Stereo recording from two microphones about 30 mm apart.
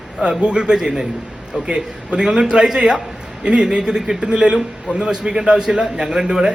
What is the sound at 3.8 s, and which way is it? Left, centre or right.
Speech, right.